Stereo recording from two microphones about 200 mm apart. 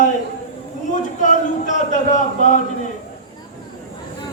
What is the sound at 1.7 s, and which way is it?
Speech, 35° left (ahead or behind).